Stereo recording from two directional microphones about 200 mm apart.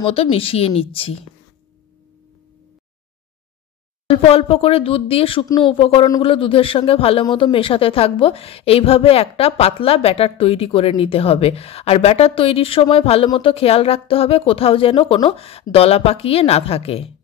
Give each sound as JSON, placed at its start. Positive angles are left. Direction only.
{"t": 0.0, "sound": "speech", "side_deg": 30}
{"t": 4.1, "sound": "speech", "side_deg": 30}